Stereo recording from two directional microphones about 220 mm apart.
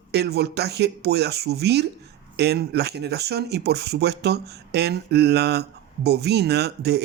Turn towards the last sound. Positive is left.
turn(degrees=-50)  # may be behind; listen again after turning